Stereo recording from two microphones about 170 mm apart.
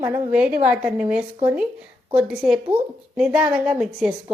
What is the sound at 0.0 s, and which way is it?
A woman's voice, 10° right (ahead or behind).